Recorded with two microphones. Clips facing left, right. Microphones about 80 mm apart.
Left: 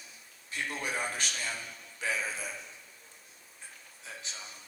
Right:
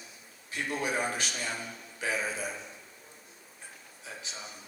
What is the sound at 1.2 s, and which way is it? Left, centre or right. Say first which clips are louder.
A man's voice: right 2 dB; right.